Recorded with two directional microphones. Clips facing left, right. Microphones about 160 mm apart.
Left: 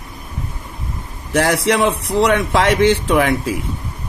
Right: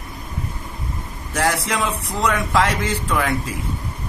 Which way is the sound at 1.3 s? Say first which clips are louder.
Left 6 dB; 70° left (ahead or behind).